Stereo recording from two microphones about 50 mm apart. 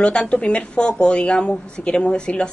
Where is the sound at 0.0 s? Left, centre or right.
Centre.